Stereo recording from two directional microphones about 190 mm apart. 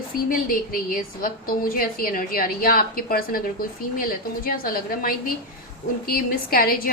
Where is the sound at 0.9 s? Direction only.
50° left (ahead or behind).